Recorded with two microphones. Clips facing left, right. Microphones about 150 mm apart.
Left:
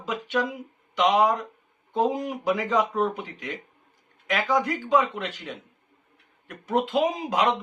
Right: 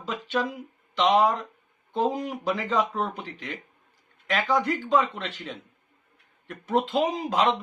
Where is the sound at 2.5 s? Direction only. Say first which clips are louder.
Left 3 dB; 15° left (ahead or behind).